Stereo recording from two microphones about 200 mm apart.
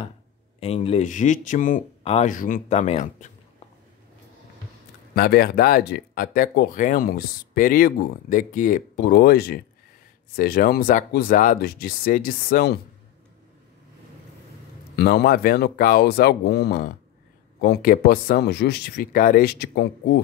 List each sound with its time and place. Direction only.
0.6 s speech: 30° left (ahead or behind)
5.1 s speech: 50° left (ahead or behind)
15.0 s speech: 50° left (ahead or behind)